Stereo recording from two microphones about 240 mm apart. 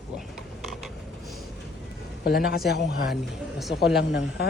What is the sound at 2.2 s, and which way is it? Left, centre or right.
Speech, left.